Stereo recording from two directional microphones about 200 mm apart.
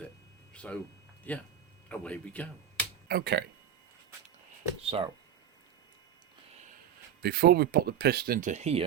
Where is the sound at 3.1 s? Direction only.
55° right (ahead or behind).